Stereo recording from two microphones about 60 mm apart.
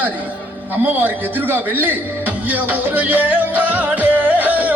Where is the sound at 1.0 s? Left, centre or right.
Right.